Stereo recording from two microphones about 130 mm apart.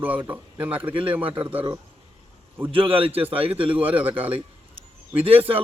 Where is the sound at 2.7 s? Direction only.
45° right (ahead or behind).